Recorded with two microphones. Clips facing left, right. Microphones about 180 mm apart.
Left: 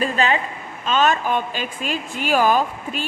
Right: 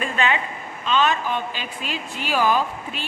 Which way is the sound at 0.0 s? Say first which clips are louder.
Left 3 dB; 35° left (ahead or behind).